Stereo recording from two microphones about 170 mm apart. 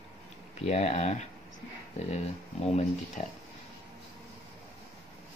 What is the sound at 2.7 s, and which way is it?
Speech, 40° left (ahead or behind).